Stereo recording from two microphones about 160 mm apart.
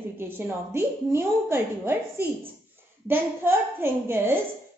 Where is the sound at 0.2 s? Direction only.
15° right (ahead or behind).